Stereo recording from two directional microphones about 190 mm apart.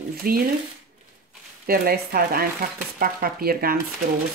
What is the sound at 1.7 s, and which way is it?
Speech, 55° right (ahead or behind).